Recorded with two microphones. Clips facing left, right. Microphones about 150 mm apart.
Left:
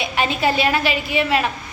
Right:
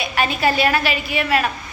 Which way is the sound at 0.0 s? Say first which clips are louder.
Even; 20° left (ahead or behind).